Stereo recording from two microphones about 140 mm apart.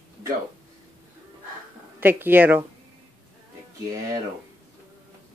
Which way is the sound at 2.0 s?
15° right (ahead or behind).